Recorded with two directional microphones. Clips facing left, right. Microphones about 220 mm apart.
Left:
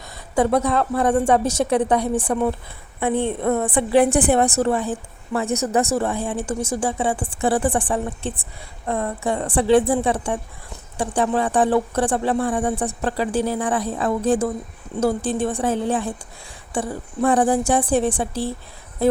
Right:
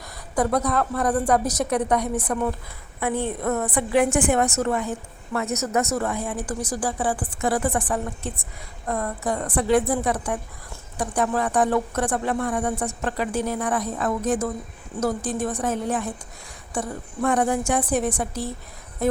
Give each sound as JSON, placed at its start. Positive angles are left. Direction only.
{"t": 0.3, "sound": "a woman's voice", "side_deg": 25}